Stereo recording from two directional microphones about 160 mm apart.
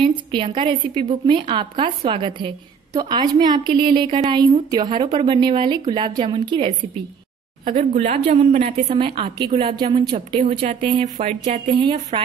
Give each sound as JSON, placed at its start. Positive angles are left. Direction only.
{"t": 0.0, "sound": "a woman's voice", "side_deg": -30}
{"t": 7.7, "sound": "a woman's voice", "side_deg": -50}
{"t": 8.6, "sound": "a woman's voice", "side_deg": -40}
{"t": 11.1, "sound": "a woman's voice", "side_deg": -55}
{"t": 12.1, "sound": "a woman's voice", "side_deg": -35}